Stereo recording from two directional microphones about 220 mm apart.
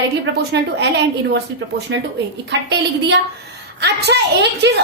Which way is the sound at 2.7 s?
50° right (ahead or behind).